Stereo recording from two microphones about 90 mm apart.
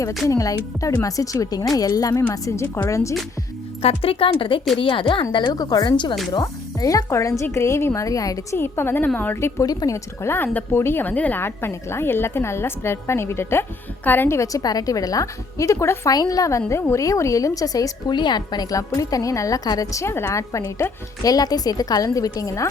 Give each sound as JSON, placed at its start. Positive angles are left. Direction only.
{"t": 0.3, "sound": "a woman's voice", "side_deg": 35}
{"t": 3.8, "sound": "speech", "side_deg": 90}
{"t": 5.5, "sound": "a woman's voice", "side_deg": 45}
{"t": 6.4, "sound": "a woman's voice", "side_deg": 40}
{"t": 8.5, "sound": "a woman's voice", "side_deg": 25}
{"t": 9.6, "sound": "a woman's voice", "side_deg": 40}
{"t": 10.2, "sound": "a woman's voice", "side_deg": 20}
{"t": 18.1, "sound": "a woman's voice", "side_deg": 55}
{"t": 21.2, "sound": "a woman's voice", "side_deg": 45}